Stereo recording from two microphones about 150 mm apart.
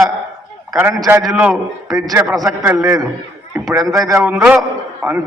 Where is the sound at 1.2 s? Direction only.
Centre (ahead or behind).